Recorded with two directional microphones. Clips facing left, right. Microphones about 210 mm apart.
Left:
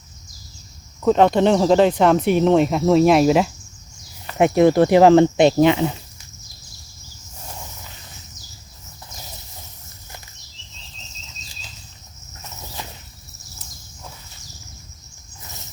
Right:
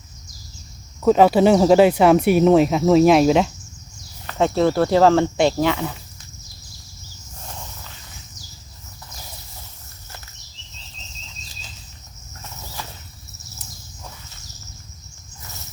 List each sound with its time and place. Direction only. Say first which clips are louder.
1.0 s speech: right 1 dB; 5° right (ahead or behind)
4.3 s speech: left 4 dB; 15° left (ahead or behind)
12.8 s a sound: even; 20° left (ahead or behind)